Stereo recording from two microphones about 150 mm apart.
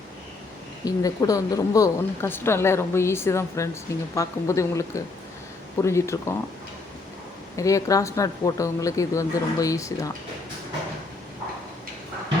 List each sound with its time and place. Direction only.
0.9 s a woman's voice: 25° left (ahead or behind)
7.5 s speech: 20° left (ahead or behind)